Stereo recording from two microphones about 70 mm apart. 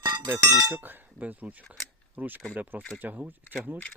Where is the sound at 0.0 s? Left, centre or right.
Right.